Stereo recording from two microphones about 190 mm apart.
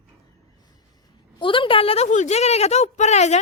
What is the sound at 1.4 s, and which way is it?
A woman's voice, 25° left (ahead or behind).